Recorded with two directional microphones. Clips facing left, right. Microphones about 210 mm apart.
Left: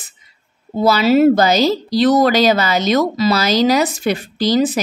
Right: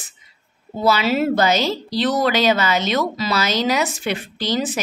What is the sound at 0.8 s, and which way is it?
Speech, 40° left (ahead or behind).